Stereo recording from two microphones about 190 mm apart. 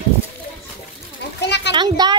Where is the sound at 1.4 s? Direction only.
65° left (ahead or behind).